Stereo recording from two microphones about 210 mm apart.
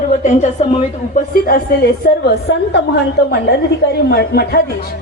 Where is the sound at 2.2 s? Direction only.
55° left (ahead or behind).